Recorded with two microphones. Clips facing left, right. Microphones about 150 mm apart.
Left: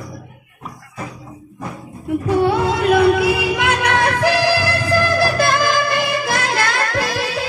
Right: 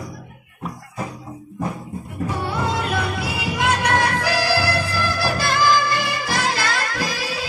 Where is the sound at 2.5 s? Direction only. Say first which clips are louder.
Left 8 dB; 65° left (ahead or behind).